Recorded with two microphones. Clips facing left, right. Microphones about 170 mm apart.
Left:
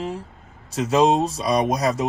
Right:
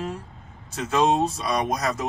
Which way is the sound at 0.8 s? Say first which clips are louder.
Left 3 dB; 35° left (ahead or behind).